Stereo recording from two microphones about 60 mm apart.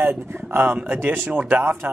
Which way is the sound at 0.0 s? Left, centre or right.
Right.